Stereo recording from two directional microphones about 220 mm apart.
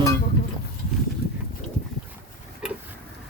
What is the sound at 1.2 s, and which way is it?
Horse, 45° left (ahead or behind).